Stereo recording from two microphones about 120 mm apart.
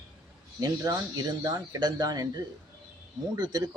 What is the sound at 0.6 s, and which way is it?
Speech, 30° right (ahead or behind).